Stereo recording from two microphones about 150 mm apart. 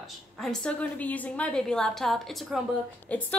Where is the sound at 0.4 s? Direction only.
5° left (ahead or behind).